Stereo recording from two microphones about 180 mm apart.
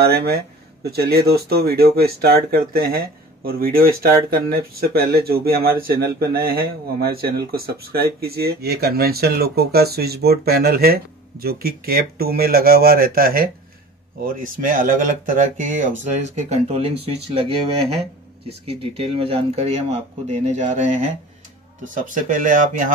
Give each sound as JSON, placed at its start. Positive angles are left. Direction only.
{"t": 0.0, "sound": "speech", "side_deg": -60}